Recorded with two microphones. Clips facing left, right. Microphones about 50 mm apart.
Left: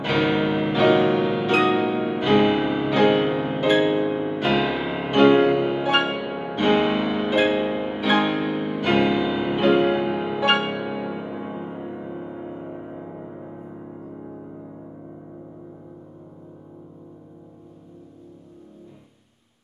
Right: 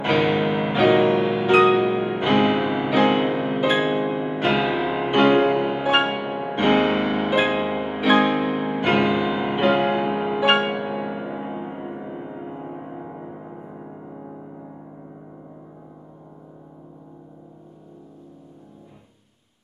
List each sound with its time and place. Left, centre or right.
0.0 s music: right; by 4.4 s centre
4.4 s music: right
4.8 s music: centre